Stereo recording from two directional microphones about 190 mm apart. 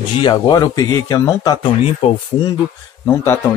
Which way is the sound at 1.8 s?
30° left (ahead or behind).